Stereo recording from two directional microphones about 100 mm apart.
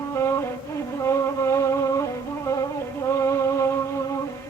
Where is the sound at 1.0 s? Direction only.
30° left (ahead or behind).